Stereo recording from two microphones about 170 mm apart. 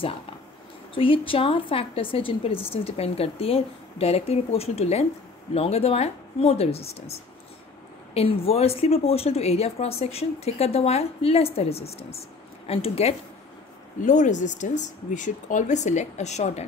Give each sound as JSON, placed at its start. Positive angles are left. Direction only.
{"t": 0.9, "sound": "a woman's voice", "side_deg": 30}
{"t": 14.0, "sound": "speech", "side_deg": 45}